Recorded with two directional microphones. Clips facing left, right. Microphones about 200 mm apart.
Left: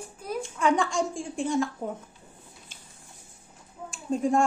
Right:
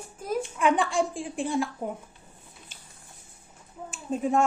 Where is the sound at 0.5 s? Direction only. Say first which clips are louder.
Even; 15° right (ahead or behind).